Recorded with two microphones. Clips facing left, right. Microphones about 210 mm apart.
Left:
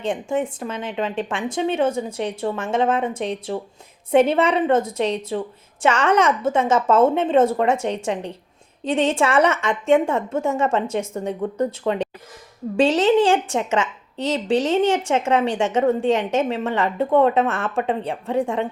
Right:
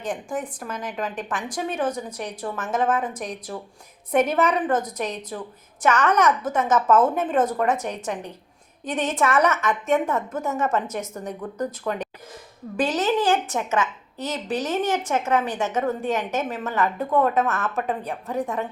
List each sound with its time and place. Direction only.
0.0 s a woman's voice: 25° left (ahead or behind)